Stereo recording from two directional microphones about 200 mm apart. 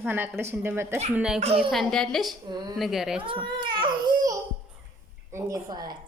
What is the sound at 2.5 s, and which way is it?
Speech, 20° right (ahead or behind).